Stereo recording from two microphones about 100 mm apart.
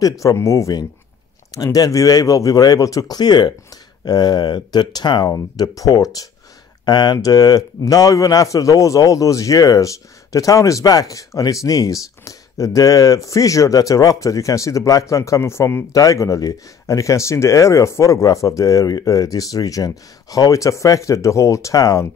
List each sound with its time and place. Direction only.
0.2 s a man's voice: 30° left (ahead or behind)